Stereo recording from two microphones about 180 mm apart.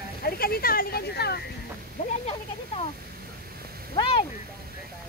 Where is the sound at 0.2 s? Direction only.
55° left (ahead or behind).